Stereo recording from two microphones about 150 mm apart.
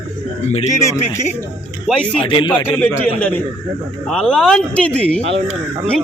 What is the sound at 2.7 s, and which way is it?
Speech, 15° left (ahead or behind).